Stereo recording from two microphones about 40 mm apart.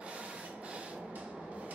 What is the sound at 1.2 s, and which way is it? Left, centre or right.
Train, right.